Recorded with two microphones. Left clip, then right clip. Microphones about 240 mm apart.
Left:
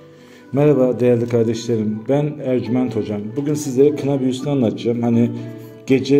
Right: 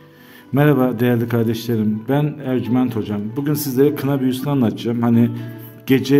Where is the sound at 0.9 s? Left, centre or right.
Right.